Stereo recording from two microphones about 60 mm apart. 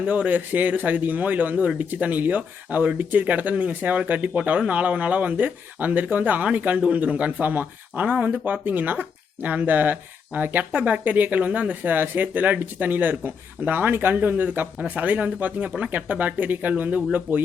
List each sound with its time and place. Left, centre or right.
0.0 s speech: right